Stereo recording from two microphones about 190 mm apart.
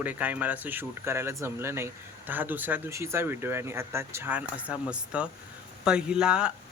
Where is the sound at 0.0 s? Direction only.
10° right (ahead or behind).